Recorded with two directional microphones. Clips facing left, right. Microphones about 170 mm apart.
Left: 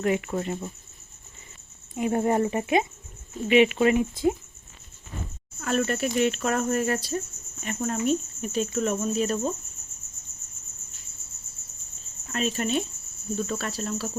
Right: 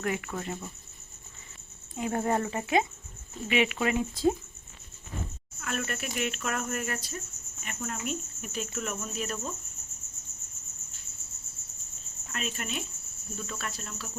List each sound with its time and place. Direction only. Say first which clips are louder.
0.0 s speech: left 7 dB; 25° left (ahead or behind)
2.0 s speech: left 5 dB; 20° left (ahead or behind)
5.5 s speech: left 9 dB; 35° left (ahead or behind)
12.3 s speech: left 10 dB; 35° left (ahead or behind)